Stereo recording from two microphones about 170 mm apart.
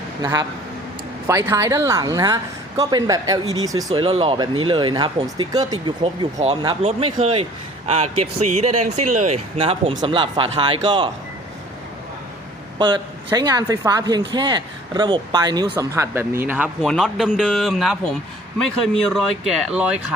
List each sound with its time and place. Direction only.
0.2 s speech: 20° right (ahead or behind)
4.0 s speech: 35° right (ahead or behind)
6.8 s speech: 35° right (ahead or behind)
12.8 s speech: 25° right (ahead or behind)
16.8 s speech: centre (ahead or behind)